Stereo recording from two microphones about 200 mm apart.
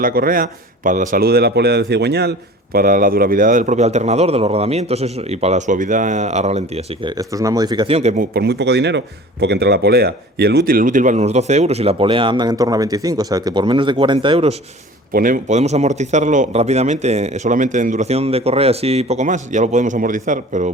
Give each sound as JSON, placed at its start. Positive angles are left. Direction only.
{"t": 0.0, "sound": "a man's voice", "side_deg": -45}
{"t": 2.7, "sound": "a man's voice", "side_deg": -45}
{"t": 7.2, "sound": "speech", "side_deg": -15}
{"t": 8.3, "sound": "speech", "side_deg": -55}
{"t": 10.7, "sound": "speech", "side_deg": -45}
{"t": 15.1, "sound": "a man's voice", "side_deg": -45}